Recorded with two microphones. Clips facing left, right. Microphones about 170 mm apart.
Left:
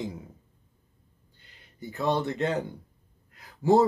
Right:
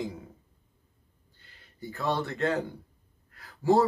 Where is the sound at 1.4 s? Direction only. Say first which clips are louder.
Even; 20° left (ahead or behind).